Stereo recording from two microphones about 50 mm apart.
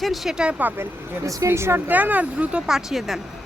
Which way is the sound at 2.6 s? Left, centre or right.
Centre.